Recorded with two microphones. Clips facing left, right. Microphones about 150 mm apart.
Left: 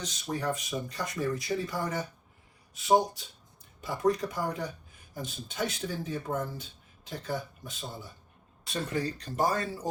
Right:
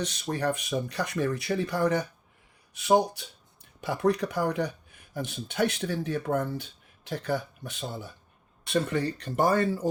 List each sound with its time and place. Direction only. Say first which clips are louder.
0.0 s speech: right 4 dB; 65° right (ahead or behind)